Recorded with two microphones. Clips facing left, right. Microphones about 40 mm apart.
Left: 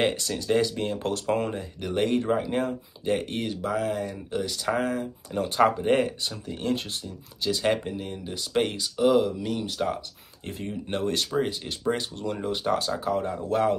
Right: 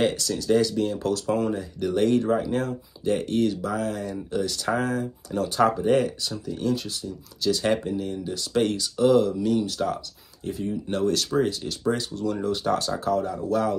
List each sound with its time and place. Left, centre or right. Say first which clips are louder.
0.0 s speech: right 2 dB; left
1.8 s speech: right 3 dB; centre
5.4 s speech: even; left
6.4 s speech: right 2 dB; left
7.4 s speech: right 2 dB; centre; by 11.2 s left
11.3 s speech: right 3 dB; centre
13.1 s speech: right 3 dB; left